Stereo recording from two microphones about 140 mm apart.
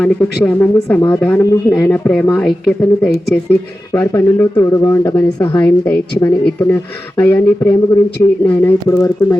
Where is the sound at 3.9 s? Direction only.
20° left (ahead or behind).